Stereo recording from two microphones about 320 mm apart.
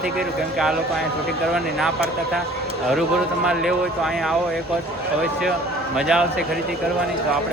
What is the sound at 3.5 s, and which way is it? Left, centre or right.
Speech, centre.